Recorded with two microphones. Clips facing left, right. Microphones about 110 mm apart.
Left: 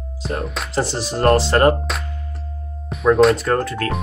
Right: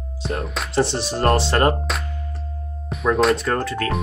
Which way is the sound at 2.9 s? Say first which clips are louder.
Left 4 dB; centre (ahead or behind).